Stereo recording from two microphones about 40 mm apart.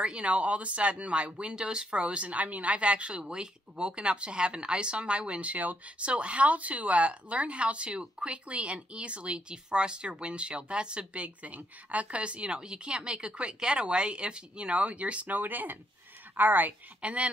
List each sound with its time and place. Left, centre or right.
0.0 s speech: right
5.9 s speech: right
11.1 s speech: right
15.2 s speech: right
17.0 s speech: right